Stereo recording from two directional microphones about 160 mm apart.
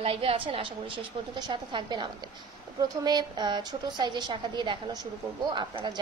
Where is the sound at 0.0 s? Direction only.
35° right (ahead or behind).